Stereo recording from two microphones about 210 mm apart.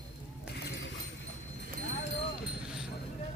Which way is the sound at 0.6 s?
50° left (ahead or behind).